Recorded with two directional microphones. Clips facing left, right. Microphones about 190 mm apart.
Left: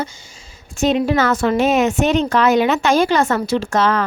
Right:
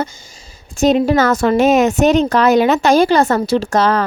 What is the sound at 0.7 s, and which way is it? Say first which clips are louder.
A woman's voice: right 4 dB; 40° right (ahead or behind).